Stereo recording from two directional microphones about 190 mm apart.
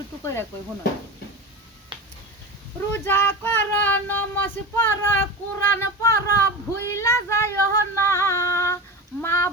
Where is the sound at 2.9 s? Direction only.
10° left (ahead or behind).